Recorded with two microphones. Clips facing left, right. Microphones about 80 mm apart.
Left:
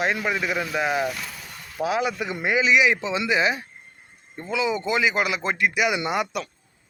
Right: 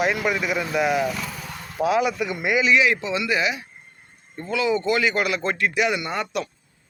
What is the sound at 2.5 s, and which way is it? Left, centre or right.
Speech, centre.